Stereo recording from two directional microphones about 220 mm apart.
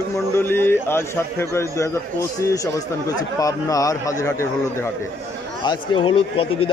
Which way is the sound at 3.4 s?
15° left (ahead or behind).